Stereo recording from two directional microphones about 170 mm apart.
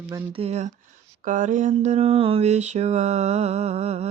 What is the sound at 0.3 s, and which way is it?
Mantra, 40° right (ahead or behind).